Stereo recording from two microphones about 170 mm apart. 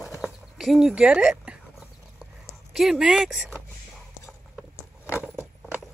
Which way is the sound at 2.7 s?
Centre (ahead or behind).